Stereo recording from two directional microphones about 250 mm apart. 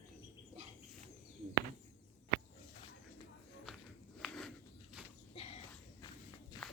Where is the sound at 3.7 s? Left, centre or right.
Centre.